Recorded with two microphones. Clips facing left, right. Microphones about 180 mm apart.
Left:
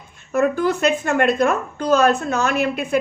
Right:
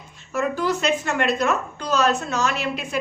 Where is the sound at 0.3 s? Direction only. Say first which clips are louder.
Left 5 dB; 55° left (ahead or behind).